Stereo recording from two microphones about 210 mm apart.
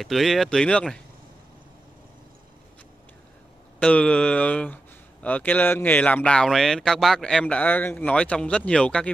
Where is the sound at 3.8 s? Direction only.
5° left (ahead or behind).